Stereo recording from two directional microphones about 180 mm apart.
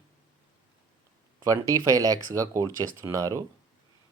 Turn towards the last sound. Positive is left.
turn(degrees=-20)  # may be behind; listen again after turning